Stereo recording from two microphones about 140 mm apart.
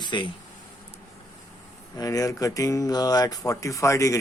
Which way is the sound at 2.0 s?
25° left (ahead or behind).